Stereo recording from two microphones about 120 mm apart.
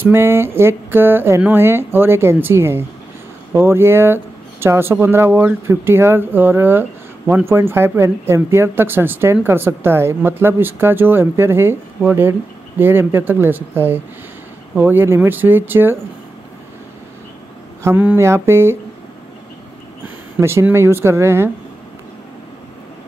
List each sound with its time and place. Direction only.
0.0 s speech: 20° right (ahead or behind)
17.8 s speech: 15° right (ahead or behind)
20.3 s speech: 20° right (ahead or behind)